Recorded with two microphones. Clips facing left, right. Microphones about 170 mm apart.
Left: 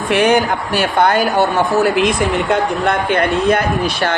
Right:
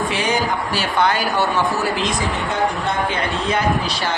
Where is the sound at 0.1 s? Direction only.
60° left (ahead or behind).